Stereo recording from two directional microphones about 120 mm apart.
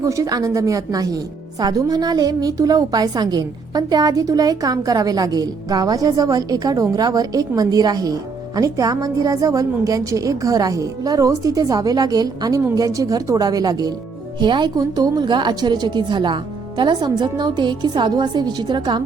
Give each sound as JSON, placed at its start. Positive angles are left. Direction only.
{"t": 0.0, "sound": "speech", "side_deg": -30}